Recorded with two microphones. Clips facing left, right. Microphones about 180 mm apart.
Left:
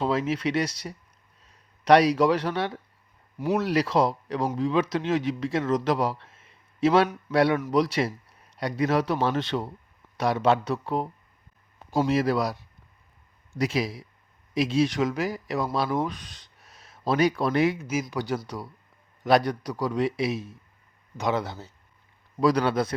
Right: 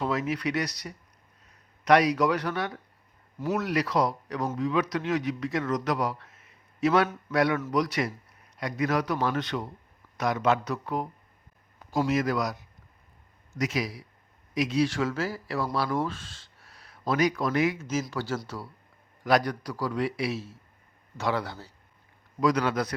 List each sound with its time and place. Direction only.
0.0 s a man's voice: 25° left (ahead or behind)
17.7 s a man's voice: 10° left (ahead or behind)
22.4 s a man's voice: 30° left (ahead or behind)